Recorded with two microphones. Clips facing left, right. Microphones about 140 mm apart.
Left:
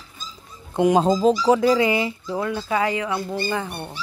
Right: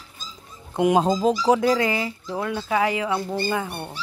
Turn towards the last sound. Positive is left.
turn(degrees=-10)  # may be behind; listen again after turning